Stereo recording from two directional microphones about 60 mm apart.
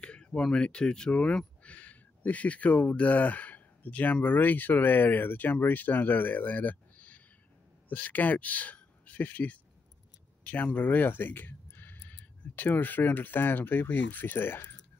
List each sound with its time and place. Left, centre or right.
0.0 s speech: centre; by 14.8 s left